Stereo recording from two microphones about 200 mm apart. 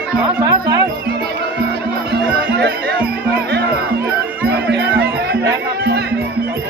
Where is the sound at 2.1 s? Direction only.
55° right (ahead or behind).